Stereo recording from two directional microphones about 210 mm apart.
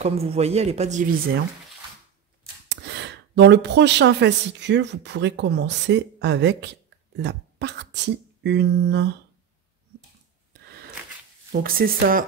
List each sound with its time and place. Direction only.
0.0 s a man's voice: 30° right (ahead or behind)
2.7 s speech: 55° right (ahead or behind)
11.6 s speech: 45° right (ahead or behind)